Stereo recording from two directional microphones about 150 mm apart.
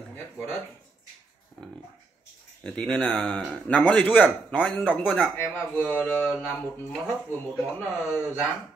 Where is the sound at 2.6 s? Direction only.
5° left (ahead or behind).